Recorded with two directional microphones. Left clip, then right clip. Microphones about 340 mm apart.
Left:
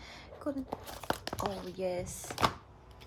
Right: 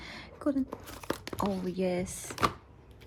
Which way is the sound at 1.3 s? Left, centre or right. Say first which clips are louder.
Right 5 dB; centre.